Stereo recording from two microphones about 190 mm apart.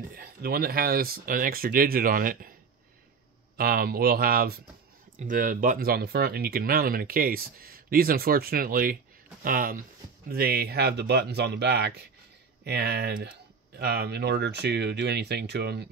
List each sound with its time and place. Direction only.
0.1 s speech: 50° right (ahead or behind)
3.5 s speech: 50° right (ahead or behind)